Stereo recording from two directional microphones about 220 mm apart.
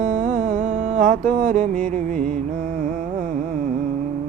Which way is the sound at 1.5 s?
35° right (ahead or behind).